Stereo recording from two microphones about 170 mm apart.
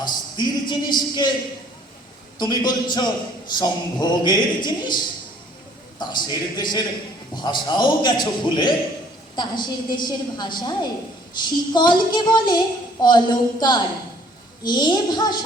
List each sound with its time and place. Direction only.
0.0 s speech: 25° left (ahead or behind)
2.4 s a woman's voice: 25° left (ahead or behind)